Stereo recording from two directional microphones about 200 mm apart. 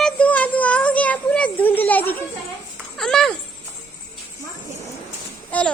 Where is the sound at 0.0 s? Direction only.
5° left (ahead or behind).